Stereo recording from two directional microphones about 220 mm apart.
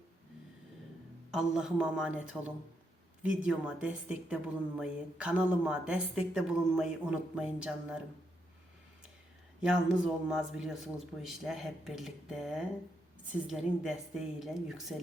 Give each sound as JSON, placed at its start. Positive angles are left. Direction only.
{"t": 1.3, "sound": "a woman's voice", "side_deg": -5}
{"t": 9.6, "sound": "a woman's voice", "side_deg": -5}